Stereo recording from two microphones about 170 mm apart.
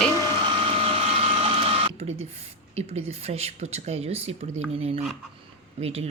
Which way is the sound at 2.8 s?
40° right (ahead or behind).